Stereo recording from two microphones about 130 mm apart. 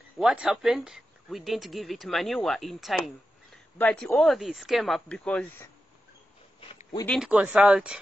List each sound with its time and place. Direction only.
0.2 s speech: 5° right (ahead or behind)
7.2 s speech: 10° right (ahead or behind)